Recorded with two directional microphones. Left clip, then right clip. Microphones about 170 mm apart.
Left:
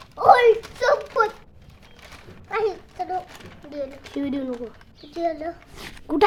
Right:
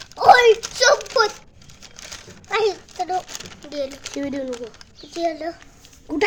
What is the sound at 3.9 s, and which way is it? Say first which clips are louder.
Speech: right 5 dB; 55° right (ahead or behind).